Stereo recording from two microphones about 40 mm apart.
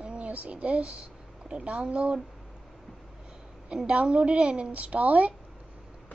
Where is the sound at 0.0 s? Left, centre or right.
Right.